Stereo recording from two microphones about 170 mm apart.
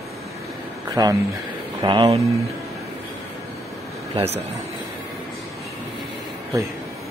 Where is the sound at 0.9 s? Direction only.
20° right (ahead or behind).